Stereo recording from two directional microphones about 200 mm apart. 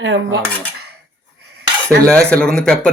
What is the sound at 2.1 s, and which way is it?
Rub, 5° left (ahead or behind).